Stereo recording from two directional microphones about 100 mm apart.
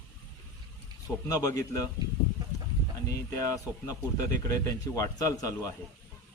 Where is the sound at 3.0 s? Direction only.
35° left (ahead or behind).